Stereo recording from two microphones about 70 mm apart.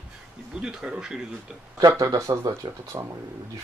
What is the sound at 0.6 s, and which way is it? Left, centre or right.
Speech, centre.